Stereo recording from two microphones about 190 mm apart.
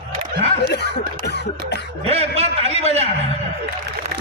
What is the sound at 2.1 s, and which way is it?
A man's voice, 30° right (ahead or behind).